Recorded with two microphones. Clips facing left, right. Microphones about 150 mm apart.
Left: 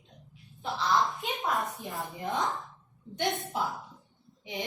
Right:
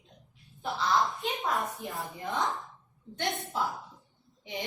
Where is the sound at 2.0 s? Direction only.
20° left (ahead or behind).